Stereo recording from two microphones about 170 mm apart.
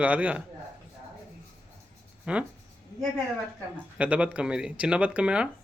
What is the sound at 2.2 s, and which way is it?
Speech, 5° right (ahead or behind).